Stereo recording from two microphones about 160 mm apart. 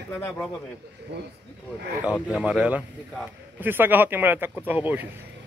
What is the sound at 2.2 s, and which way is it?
Speech, 5° right (ahead or behind).